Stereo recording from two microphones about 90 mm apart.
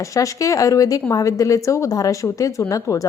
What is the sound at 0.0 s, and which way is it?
A woman's voice, 35° left (ahead or behind).